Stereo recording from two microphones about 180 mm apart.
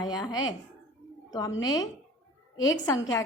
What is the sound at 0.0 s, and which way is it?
A woman's voice, 20° left (ahead or behind).